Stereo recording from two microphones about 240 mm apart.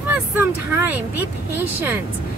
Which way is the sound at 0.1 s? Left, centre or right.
Centre.